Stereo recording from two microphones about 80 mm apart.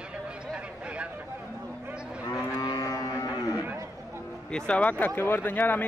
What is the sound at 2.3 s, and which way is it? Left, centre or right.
Cattle, left.